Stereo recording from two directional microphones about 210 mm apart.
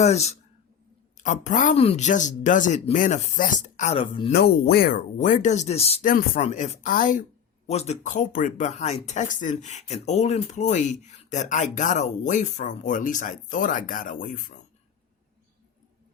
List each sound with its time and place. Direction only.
0.0 s speech: 30° left (ahead or behind)
4.3 s speech: 45° left (ahead or behind)